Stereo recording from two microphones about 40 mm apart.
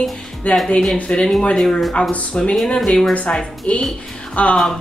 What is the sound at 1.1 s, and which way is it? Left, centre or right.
Speech, centre.